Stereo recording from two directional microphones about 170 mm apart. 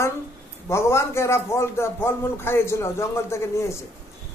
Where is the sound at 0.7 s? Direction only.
15° left (ahead or behind).